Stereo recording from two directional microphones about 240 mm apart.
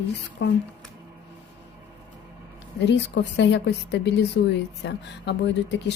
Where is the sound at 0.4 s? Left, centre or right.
Left.